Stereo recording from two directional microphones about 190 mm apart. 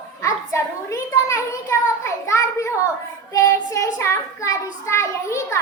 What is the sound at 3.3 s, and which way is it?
Child singing, 15° left (ahead or behind).